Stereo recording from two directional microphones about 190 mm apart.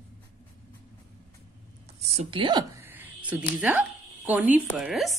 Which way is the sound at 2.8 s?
10° right (ahead or behind).